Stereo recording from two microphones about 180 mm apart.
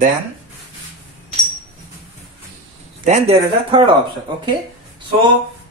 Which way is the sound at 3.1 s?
30° right (ahead or behind).